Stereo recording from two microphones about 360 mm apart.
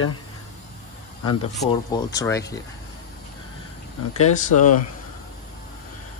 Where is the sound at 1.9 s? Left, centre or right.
Centre.